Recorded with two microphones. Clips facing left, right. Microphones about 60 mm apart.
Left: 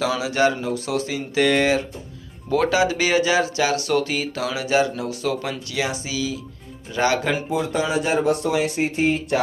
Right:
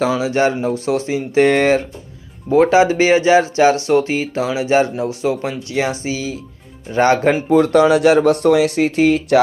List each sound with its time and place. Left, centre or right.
0.0 s speech: right
2.5 s speech: right
7.5 s speech: right